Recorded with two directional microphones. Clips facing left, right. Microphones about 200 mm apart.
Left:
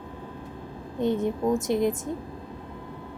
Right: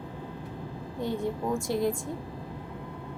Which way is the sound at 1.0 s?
20° left (ahead or behind).